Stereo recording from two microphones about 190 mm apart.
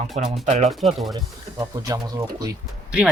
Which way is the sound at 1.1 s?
20° right (ahead or behind).